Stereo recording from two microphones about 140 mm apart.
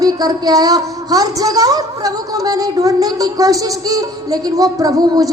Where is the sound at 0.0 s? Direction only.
25° right (ahead or behind).